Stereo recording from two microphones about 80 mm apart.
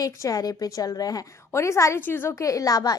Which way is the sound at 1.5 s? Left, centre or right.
Left.